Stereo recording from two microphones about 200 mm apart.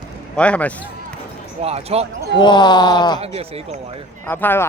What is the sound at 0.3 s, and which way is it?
Speech, 5° left (ahead or behind).